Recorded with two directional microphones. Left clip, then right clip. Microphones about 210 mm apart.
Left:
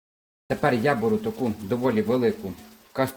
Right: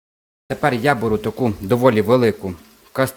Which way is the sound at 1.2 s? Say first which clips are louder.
Right 6 dB; 55° right (ahead or behind).